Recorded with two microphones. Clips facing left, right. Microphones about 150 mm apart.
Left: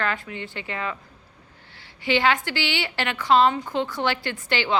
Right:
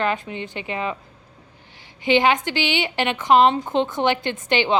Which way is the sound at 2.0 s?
20° right (ahead or behind).